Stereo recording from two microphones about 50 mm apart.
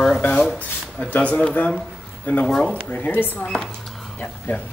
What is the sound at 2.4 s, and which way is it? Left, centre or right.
Speech, centre.